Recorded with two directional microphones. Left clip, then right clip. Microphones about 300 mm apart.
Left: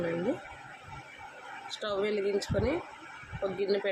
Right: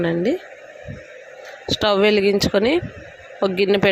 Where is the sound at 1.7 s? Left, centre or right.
Right.